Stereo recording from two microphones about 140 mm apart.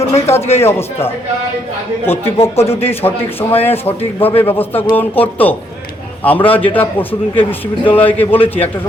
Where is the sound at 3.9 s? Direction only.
40° left (ahead or behind).